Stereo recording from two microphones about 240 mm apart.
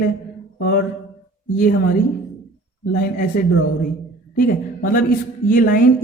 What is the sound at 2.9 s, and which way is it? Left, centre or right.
Speech, left.